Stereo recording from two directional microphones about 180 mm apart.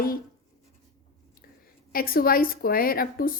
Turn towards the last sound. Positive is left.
turn(degrees=55)  # may be behind; listen again after turning